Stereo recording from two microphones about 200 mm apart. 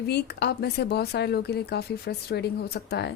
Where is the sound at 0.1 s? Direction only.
55° left (ahead or behind).